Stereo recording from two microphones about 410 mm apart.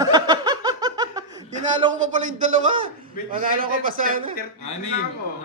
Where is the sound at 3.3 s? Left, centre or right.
Centre.